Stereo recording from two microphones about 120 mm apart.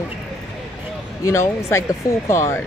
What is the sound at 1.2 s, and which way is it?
Speech, 25° left (ahead or behind).